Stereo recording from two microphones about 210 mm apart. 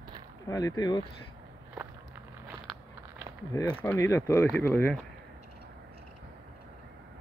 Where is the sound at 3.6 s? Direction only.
15° left (ahead or behind).